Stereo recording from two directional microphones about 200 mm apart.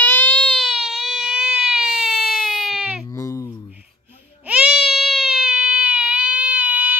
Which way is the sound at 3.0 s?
15° left (ahead or behind).